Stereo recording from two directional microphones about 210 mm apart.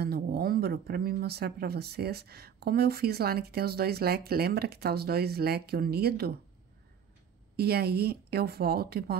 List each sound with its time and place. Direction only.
0.0 s speech: 50° right (ahead or behind)
7.5 s speech: 50° right (ahead or behind)